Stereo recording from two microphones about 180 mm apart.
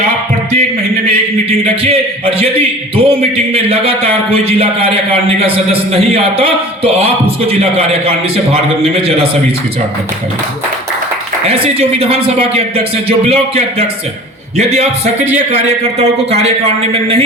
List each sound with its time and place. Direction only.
1.5 s a man's voice: 30° right (ahead or behind)
11.4 s a man's voice: 35° right (ahead or behind)